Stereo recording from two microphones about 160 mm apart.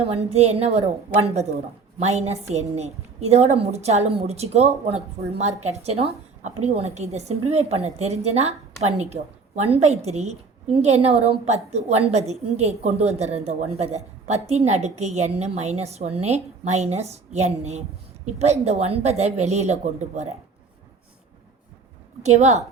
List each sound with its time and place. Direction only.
0.0 s a woman's voice: 40° right (ahead or behind)
22.2 s a woman's voice: 45° right (ahead or behind)